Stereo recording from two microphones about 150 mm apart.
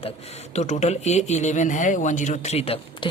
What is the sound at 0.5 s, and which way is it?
Speech, 50° left (ahead or behind).